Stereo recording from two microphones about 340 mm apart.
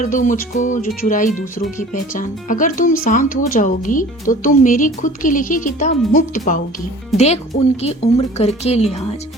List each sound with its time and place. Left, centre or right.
0.0 s speech: left